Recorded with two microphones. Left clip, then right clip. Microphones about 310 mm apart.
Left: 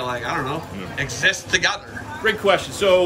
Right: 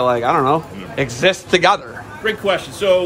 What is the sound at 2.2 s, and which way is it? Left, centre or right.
Speech, centre.